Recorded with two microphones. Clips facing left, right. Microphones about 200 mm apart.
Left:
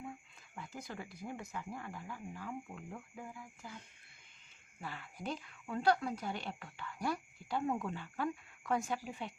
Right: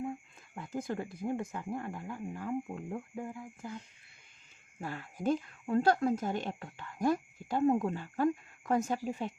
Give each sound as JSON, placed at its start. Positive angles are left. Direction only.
{"t": 0.0, "sound": "speech", "side_deg": -45}
{"t": 4.8, "sound": "speech", "side_deg": -45}